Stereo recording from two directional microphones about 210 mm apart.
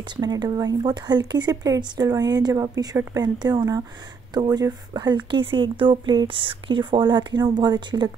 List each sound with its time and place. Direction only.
0.2 s speech: 20° right (ahead or behind)